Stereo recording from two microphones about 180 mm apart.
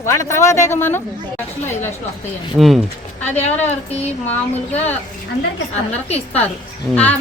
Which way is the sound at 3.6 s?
35° left (ahead or behind).